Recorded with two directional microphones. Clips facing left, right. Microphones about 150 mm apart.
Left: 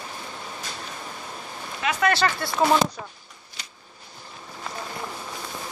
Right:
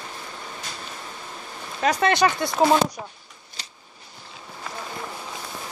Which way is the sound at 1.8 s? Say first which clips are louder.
Right 3 dB; 40° right (ahead or behind).